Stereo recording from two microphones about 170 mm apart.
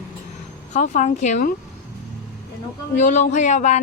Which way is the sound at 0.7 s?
45° left (ahead or behind).